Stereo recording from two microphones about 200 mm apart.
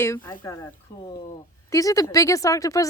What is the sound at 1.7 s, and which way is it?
Speech, 15° left (ahead or behind).